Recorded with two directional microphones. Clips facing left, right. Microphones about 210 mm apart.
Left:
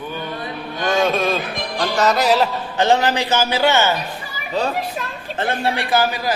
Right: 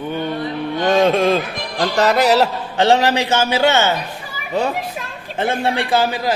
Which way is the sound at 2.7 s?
20° right (ahead or behind).